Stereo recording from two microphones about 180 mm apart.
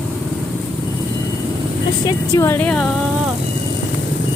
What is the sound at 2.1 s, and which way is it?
Speech, 15° left (ahead or behind).